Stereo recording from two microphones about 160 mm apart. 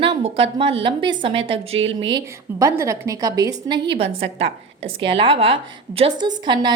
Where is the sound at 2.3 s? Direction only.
20° right (ahead or behind).